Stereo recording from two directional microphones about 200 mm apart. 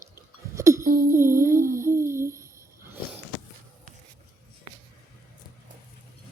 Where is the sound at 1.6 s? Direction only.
45° right (ahead or behind).